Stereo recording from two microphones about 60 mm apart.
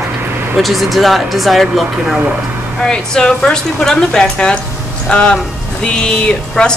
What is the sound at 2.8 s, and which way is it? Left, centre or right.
Speech, centre.